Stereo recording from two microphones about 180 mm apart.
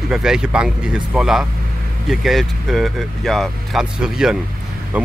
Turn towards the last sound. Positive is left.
turn(degrees=-10)  # may be behind; listen again after turning